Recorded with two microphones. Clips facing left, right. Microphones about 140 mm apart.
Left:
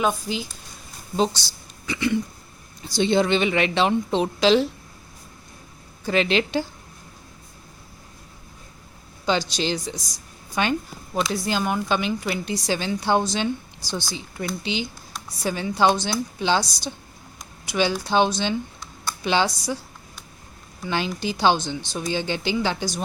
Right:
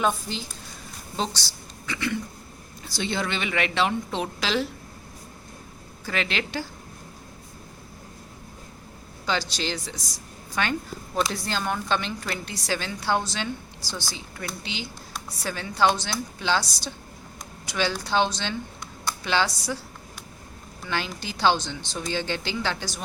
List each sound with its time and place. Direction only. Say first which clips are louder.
0.0 s speech: left 2 dB; 5° left (ahead or behind)
1.9 s speech: left 6 dB; 20° left (ahead or behind)
6.1 s speech: left 8 dB; 20° left (ahead or behind)
9.2 s a woman's voice: left 5 dB; 15° left (ahead or behind)
20.8 s a woman's voice: left 5 dB; 20° left (ahead or behind)